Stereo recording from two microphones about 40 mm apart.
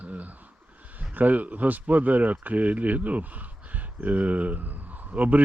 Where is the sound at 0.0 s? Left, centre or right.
Right.